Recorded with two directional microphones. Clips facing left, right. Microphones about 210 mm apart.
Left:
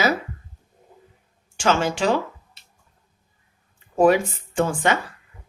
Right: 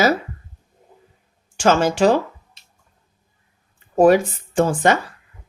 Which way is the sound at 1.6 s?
40° right (ahead or behind).